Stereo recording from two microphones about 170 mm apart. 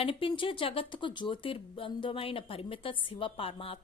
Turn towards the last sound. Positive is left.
turn(degrees=35)  # may be behind; listen again after turning